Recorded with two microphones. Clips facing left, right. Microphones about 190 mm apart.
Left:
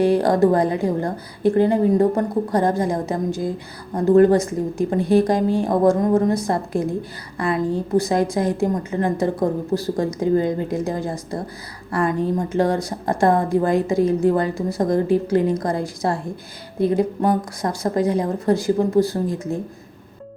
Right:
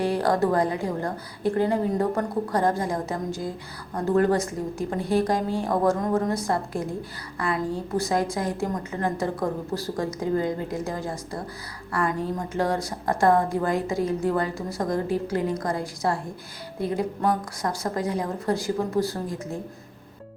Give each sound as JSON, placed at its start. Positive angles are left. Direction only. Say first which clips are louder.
{"t": 0.0, "sound": "a woman's voice", "louder": "left 7 dB", "side_deg": 20}